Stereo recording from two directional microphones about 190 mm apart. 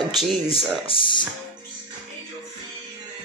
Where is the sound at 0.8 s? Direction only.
25° left (ahead or behind).